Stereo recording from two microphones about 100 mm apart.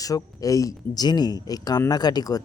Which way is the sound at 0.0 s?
35° left (ahead or behind).